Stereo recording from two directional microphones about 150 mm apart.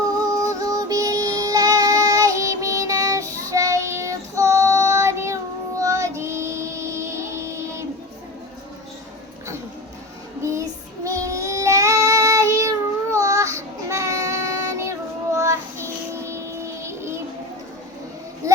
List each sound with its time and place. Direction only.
0.2 s music: 20° right (ahead or behind)
5.8 s child singing: 20° right (ahead or behind)
10.4 s child singing: 20° right (ahead or behind)
18.4 s a sound: 20° right (ahead or behind)